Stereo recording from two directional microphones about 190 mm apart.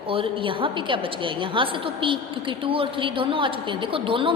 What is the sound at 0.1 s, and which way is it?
A woman's voice, 25° right (ahead or behind).